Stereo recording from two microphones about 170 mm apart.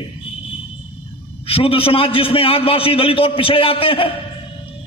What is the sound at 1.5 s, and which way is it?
A man's voice, 35° left (ahead or behind).